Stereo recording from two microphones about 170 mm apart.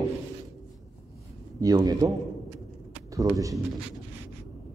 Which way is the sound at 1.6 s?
25° right (ahead or behind).